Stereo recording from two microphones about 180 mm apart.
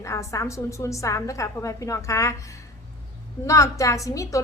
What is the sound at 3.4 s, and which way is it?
Speech, 15° left (ahead or behind).